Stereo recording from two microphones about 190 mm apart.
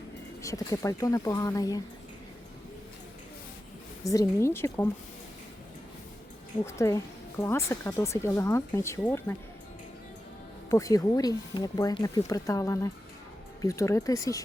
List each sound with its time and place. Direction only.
0.4 s speech: 15° left (ahead or behind)
4.0 s speech: 15° left (ahead or behind)
6.7 s speech: 15° left (ahead or behind)
10.7 s speech: 15° left (ahead or behind)